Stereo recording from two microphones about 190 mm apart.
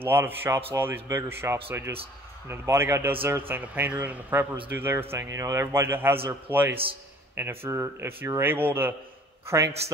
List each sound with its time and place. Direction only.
0.0 s speech: 10° right (ahead or behind)